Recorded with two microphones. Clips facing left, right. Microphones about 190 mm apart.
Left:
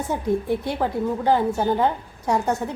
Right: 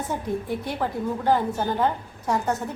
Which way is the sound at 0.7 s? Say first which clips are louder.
Left 1 dB; 15° left (ahead or behind).